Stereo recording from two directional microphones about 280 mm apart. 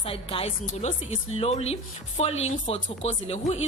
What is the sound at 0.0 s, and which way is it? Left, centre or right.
A woman's voice, centre.